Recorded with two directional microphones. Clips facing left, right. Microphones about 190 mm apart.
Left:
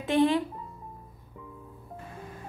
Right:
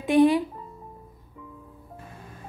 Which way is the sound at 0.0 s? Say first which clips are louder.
Right 5 dB; 15° right (ahead or behind).